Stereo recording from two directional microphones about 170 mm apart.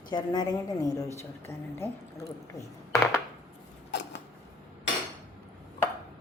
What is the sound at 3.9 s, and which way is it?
Creak, 90° left.